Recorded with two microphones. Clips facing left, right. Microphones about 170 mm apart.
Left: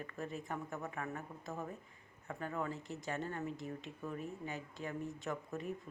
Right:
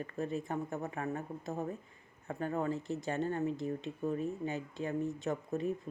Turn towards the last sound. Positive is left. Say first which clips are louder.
# right 7 dB
turn(degrees=-25)  # may be behind; listen again after turning